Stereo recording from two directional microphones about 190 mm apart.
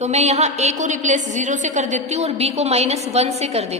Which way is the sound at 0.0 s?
35° right (ahead or behind).